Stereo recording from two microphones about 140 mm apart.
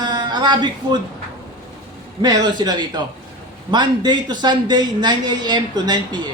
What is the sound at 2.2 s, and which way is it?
A woman's voice, 30° right (ahead or behind).